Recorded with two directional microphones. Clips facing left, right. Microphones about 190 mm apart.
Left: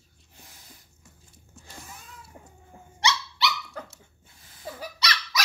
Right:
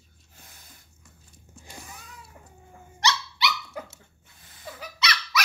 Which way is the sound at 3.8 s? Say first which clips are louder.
Right 2 dB; 10° right (ahead or behind).